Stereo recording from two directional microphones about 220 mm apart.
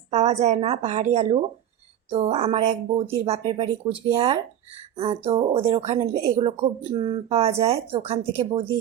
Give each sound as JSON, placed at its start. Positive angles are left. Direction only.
{"t": 0.1, "sound": "a woman's voice", "side_deg": -30}